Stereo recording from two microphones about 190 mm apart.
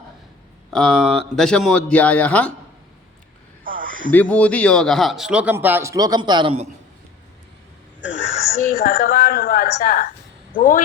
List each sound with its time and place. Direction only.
0.7 s speech: centre (ahead or behind)
3.6 s a sound: 45° right (ahead or behind)
4.1 s speech: 5° left (ahead or behind); by 6.7 s 30° right (ahead or behind)
8.6 s a woman's voice: 50° left (ahead or behind)